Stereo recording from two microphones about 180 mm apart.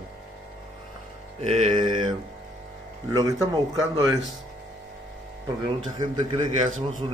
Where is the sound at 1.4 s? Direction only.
30° right (ahead or behind).